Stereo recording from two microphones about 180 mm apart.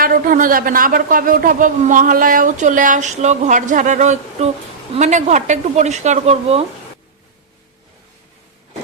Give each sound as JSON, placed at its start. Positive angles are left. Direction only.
{"t": 0.0, "sound": "a man's voice", "side_deg": -55}